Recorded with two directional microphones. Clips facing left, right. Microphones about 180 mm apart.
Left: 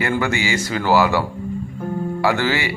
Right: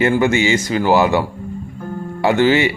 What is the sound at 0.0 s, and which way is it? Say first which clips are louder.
Speech: right 6 dB; 20° right (ahead or behind).